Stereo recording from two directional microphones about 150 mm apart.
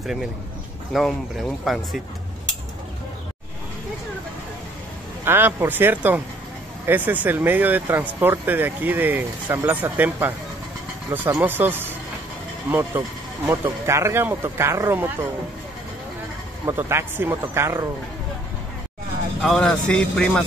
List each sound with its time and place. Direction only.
0.0 s speech: 5° right (ahead or behind)
5.2 s speech: 15° right (ahead or behind)
13.5 s speech: 20° right (ahead or behind)
16.6 s speech: 15° right (ahead or behind)
19.4 s speech: 5° left (ahead or behind)